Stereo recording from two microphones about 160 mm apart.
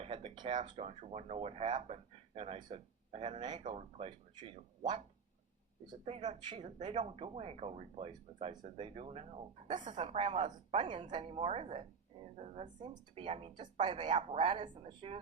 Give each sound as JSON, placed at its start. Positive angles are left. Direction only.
{"t": 0.0, "sound": "speech", "side_deg": -35}
{"t": 4.8, "sound": "speech", "side_deg": -50}
{"t": 6.2, "sound": "speech", "side_deg": -45}
{"t": 10.0, "sound": "speech", "side_deg": -35}
{"t": 14.1, "sound": "speech", "side_deg": -40}